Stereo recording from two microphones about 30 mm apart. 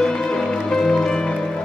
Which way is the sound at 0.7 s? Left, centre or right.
Left.